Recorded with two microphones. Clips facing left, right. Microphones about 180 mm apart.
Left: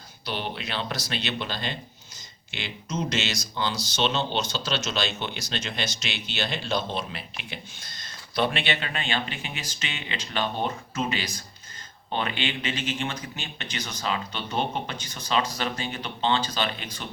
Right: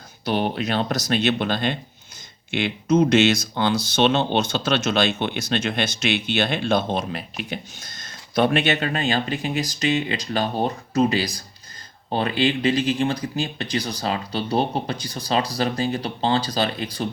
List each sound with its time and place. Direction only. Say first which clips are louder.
0.3 s speech: right 9 dB; 50° right (ahead or behind)